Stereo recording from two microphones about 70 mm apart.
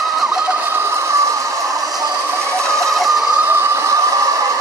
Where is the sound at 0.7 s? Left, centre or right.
Right.